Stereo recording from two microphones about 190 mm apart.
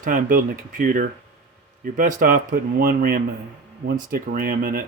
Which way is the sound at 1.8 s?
45° right (ahead or behind).